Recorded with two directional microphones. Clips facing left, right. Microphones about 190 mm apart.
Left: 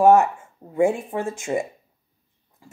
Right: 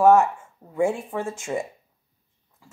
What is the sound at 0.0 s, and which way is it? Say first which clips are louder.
Speech: left 1 dB; 20° left (ahead or behind).